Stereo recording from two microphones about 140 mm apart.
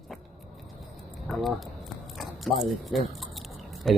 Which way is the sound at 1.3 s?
Centre (ahead or behind).